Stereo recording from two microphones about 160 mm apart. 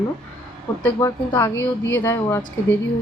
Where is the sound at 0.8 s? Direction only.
15° left (ahead or behind).